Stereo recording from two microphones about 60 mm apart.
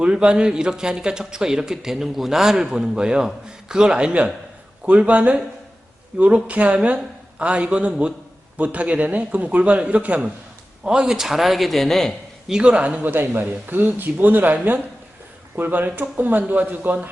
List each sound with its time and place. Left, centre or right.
0.0 s a man's voice: centre
10.8 s a man's voice: centre
12.5 s speech: centre